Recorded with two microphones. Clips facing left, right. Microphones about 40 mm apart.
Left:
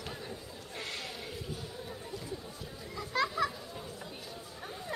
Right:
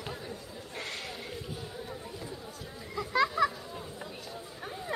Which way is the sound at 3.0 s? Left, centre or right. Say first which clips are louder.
Right 5 dB; centre.